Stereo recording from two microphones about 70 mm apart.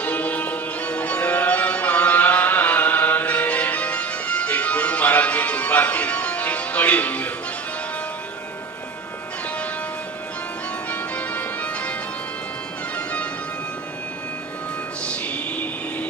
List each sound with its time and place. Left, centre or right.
0.0 s music: left
10.8 s music: left
15.0 s music: centre